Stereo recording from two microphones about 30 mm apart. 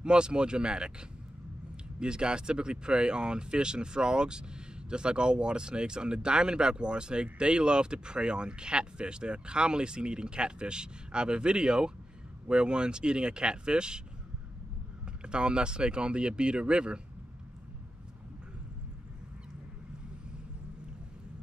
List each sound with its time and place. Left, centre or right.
0.0 s speech: right
2.0 s speech: right
15.2 s speech: right